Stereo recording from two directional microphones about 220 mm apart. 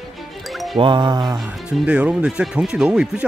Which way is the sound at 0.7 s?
20° right (ahead or behind).